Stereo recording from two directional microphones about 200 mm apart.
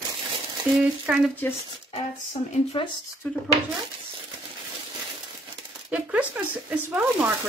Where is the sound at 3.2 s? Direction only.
10° left (ahead or behind).